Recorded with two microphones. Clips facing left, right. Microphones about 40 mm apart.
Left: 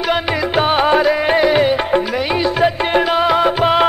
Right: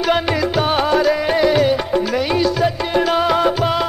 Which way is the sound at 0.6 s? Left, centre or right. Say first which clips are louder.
Left 4 dB; left.